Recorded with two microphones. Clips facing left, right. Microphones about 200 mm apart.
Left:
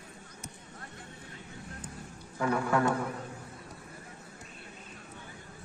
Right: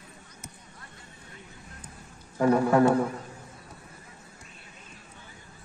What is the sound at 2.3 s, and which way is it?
Speech, 35° right (ahead or behind).